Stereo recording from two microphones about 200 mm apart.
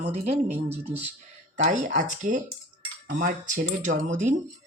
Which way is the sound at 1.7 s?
40° right (ahead or behind).